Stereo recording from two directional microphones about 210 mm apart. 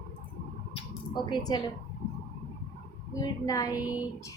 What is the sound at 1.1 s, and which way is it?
Speech, 20° left (ahead or behind).